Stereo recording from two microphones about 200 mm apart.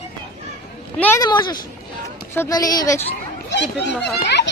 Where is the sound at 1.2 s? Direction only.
20° left (ahead or behind).